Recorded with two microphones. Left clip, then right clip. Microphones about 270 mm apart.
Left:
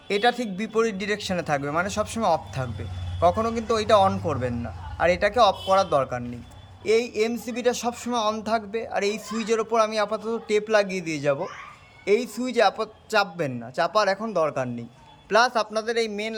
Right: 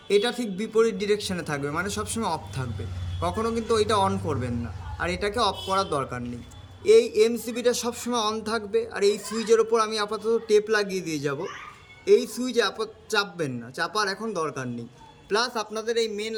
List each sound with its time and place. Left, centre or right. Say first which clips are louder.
0.1 s a man's voice: left 1 dB; centre